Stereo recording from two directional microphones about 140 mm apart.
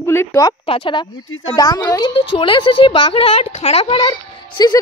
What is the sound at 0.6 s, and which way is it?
A woman's voice, 40° left (ahead or behind).